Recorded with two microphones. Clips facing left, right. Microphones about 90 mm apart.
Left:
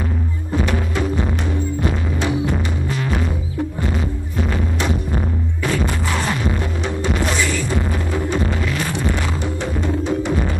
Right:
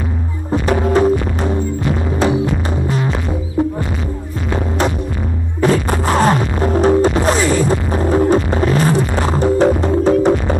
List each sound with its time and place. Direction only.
0.8 s music: 40° right (ahead or behind)
5.6 s music: 40° right (ahead or behind)